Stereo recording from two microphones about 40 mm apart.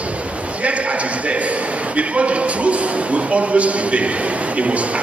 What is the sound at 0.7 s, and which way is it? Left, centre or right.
A man's voice, right.